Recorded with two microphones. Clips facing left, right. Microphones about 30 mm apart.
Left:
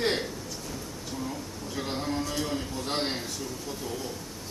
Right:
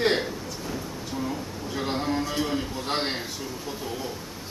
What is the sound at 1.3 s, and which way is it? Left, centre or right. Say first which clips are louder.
A man's voice: right 4 dB; centre.